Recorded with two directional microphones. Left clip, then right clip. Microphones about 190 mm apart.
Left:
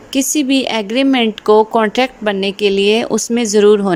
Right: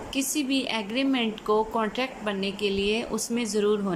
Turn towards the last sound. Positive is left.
turn(degrees=45)  # may be behind; listen again after turning